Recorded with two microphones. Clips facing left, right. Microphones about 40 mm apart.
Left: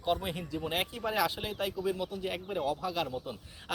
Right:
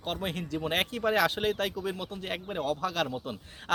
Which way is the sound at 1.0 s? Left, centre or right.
Right.